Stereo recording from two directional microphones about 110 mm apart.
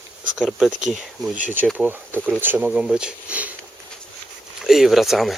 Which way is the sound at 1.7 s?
15° right (ahead or behind).